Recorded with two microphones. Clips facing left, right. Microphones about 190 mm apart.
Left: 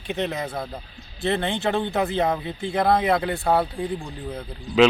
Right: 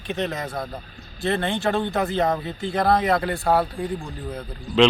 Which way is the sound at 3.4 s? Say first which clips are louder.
Right 1 dB; centre (ahead or behind).